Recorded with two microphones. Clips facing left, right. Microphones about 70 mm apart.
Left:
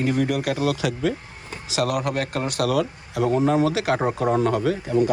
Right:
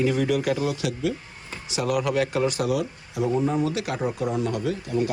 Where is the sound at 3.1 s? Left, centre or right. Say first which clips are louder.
Left 4 dB; left.